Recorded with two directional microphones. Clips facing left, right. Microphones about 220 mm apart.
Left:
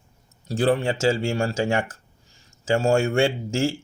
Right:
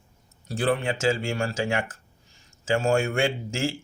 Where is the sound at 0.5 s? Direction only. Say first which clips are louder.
Left 4 dB; 40° left (ahead or behind).